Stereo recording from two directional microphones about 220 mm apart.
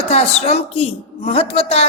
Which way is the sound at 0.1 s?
30° left (ahead or behind).